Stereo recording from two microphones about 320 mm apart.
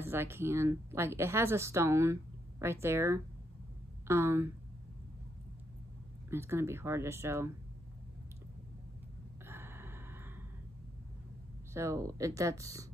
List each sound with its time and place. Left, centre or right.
0.0 s speech: centre
6.3 s speech: centre
9.5 s gasp: centre
11.7 s speech: centre